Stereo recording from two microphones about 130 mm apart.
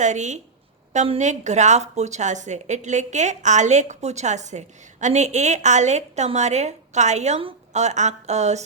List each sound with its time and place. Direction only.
0.0 s a woman's voice: 65° right (ahead or behind)